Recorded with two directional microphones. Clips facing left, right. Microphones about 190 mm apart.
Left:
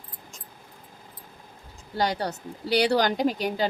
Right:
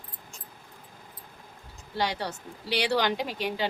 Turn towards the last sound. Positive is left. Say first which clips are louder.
# left 6 dB
turn(degrees=45)  # may be behind; listen again after turning